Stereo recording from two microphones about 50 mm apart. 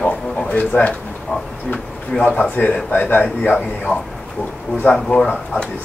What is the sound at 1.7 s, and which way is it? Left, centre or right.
Speech, left.